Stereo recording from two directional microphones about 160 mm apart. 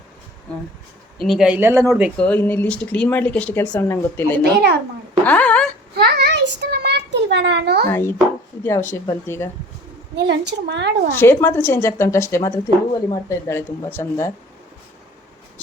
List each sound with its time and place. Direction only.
1.2 s speech: centre (ahead or behind)
2.1 s a woman's voice: 10° left (ahead or behind)
5.2 s a sound: 10° left (ahead or behind)
6.0 s a sound: 90° right
7.9 s a woman's voice: 15° left (ahead or behind)
10.2 s a woman's voice: 90° right
11.1 s a woman's voice: 15° left (ahead or behind)